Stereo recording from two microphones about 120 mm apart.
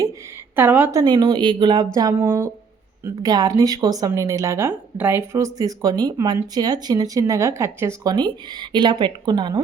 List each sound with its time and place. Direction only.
0.5 s a woman's voice: 15° right (ahead or behind)
0.9 s speech: 30° right (ahead or behind)
2.0 s speech: 25° right (ahead or behind)
8.1 s speech: 35° right (ahead or behind)